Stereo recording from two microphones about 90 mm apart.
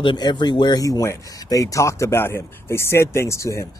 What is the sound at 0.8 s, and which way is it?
Speech, 40° left (ahead or behind).